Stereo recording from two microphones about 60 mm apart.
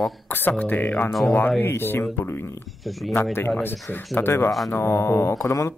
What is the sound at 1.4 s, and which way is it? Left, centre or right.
Speech, left.